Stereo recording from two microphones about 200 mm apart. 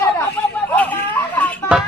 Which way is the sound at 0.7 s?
10° left (ahead or behind).